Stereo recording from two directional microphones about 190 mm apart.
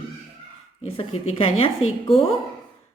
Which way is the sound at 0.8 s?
30° left (ahead or behind).